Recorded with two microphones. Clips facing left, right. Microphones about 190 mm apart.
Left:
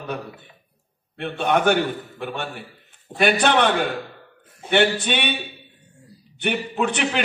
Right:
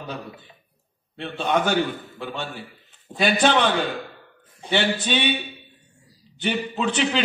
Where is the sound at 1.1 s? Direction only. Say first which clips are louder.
Left 2 dB; 60° left (ahead or behind).